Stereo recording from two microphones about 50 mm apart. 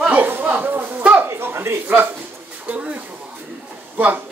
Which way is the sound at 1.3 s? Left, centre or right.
Right.